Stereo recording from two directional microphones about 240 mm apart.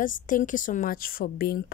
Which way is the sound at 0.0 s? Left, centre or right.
Left.